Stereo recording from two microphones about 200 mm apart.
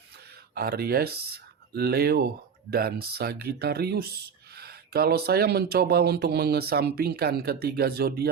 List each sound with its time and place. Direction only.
0.5 s speech: 50° right (ahead or behind)